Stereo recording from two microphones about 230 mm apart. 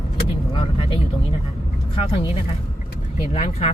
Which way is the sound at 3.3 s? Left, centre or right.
Left.